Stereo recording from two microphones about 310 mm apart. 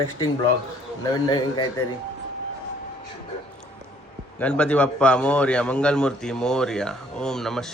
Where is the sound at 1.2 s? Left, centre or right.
Centre.